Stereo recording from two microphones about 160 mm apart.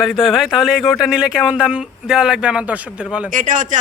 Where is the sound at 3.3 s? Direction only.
55° right (ahead or behind).